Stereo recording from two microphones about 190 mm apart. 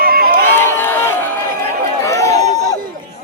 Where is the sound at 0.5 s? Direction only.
10° left (ahead or behind).